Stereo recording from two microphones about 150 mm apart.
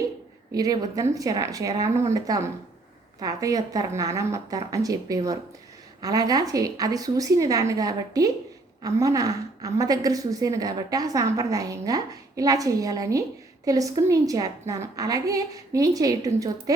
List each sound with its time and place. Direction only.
0.5 s a woman's voice: 25° right (ahead or behind)